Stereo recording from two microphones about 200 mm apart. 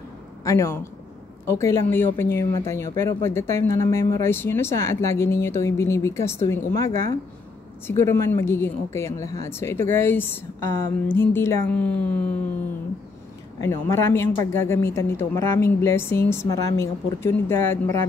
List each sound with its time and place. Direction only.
0.4 s a man's voice: 15° left (ahead or behind)
13.6 s a woman's voice: 15° left (ahead or behind)